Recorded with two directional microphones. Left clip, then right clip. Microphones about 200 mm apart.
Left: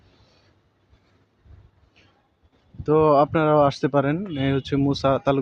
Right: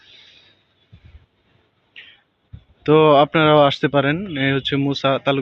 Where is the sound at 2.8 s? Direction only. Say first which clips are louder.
Right 5 dB; centre (ahead or behind).